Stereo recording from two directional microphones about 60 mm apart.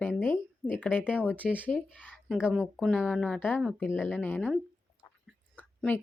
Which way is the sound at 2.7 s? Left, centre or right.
Centre.